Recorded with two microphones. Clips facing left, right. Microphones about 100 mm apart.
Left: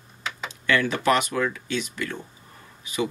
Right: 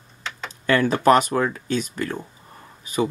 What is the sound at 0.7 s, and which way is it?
Speech, 40° right (ahead or behind).